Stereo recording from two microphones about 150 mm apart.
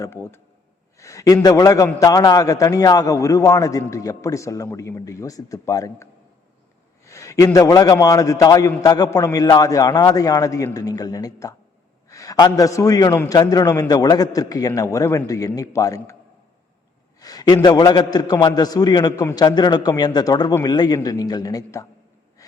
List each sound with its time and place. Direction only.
0.0 s a man's voice: 15° left (ahead or behind)
17.2 s a man's voice: 25° left (ahead or behind)